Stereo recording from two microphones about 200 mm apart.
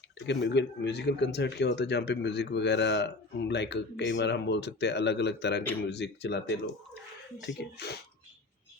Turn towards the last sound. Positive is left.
turn(degrees=55)  # may be behind; listen again after turning